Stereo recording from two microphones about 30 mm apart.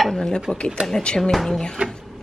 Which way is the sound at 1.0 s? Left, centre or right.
Left.